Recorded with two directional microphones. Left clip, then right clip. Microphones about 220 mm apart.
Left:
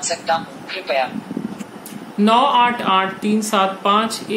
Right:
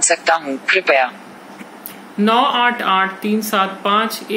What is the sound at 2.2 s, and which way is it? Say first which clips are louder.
Speech: left 1 dB; 10° left (ahead or behind).